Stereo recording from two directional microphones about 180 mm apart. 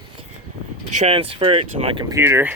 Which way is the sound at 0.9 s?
35° right (ahead or behind).